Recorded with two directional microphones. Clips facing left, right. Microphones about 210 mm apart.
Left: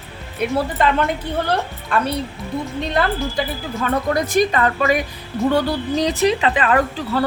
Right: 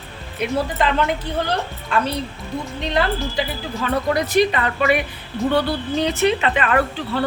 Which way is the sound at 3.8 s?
45° left (ahead or behind).